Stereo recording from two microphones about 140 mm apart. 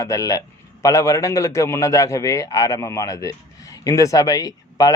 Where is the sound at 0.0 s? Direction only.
20° left (ahead or behind).